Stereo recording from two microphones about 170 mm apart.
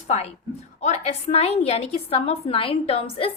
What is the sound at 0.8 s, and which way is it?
A woman's voice, 40° left (ahead or behind).